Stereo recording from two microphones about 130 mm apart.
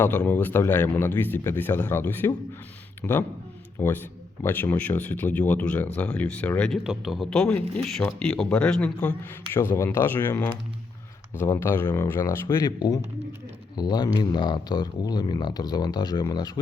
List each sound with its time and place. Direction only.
0.0 s a man's voice: 15° left (ahead or behind)
9.6 s speech: 20° left (ahead or behind)
11.5 s speech: 15° left (ahead or behind)
12.5 s speech: 30° left (ahead or behind)